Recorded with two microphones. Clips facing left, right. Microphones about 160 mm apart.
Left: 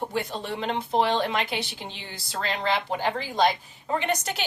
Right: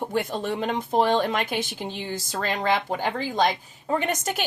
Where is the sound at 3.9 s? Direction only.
45° right (ahead or behind).